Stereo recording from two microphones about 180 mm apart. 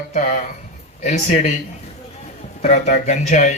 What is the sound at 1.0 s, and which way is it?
Speech, 40° left (ahead or behind).